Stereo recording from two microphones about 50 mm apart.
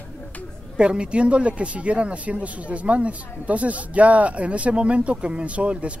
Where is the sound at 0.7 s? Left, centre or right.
Right.